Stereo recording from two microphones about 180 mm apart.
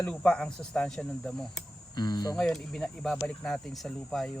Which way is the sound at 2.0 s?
20° left (ahead or behind).